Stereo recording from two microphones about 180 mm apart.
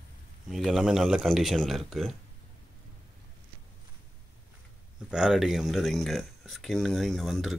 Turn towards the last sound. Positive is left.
turn(degrees=0)  # may be behind; listen again after turning